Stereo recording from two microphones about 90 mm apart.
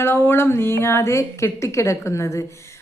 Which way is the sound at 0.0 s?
25° left (ahead or behind).